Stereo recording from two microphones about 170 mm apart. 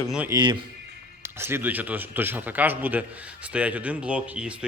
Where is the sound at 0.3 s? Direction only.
25° right (ahead or behind).